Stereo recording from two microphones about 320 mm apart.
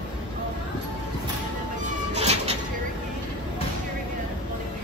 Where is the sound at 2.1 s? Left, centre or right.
Centre.